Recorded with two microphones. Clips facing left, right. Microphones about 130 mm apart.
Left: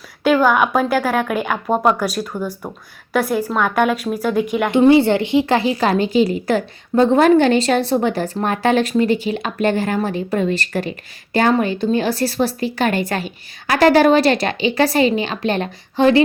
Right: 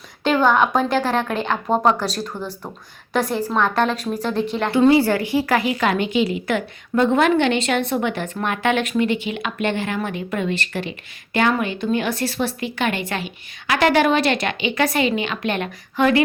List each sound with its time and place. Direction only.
0.3 s a woman's voice: 5° left (ahead or behind); by 16.2 s 30° left (ahead or behind)